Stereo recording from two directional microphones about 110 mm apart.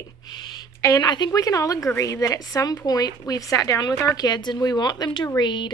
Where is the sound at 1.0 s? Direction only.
40° left (ahead or behind).